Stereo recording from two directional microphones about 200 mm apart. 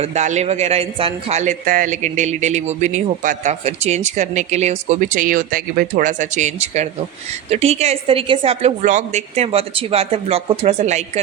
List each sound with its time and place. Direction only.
0.0 s a man's voice: 35° right (ahead or behind)